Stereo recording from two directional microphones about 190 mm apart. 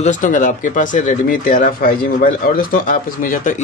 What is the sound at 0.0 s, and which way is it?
Speech, 40° left (ahead or behind).